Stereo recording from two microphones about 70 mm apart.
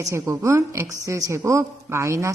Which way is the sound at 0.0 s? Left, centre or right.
Right.